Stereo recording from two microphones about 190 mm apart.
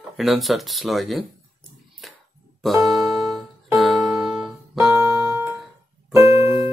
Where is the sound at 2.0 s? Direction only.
Centre (ahead or behind).